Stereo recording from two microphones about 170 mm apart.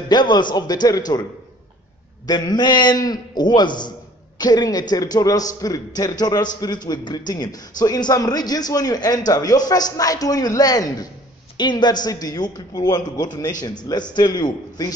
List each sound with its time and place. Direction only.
0.1 s a man's voice: 25° left (ahead or behind)
2.2 s a man's voice: 25° left (ahead or behind)